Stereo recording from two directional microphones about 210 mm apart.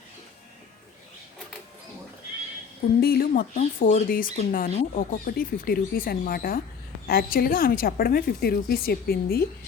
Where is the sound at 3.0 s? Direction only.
45° left (ahead or behind).